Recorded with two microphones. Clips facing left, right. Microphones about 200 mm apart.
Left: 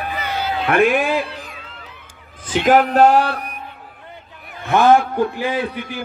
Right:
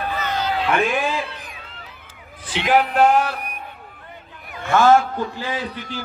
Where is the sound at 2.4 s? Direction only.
45° left (ahead or behind).